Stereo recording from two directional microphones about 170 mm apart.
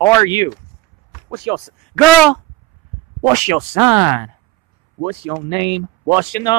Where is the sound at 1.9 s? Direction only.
5° left (ahead or behind).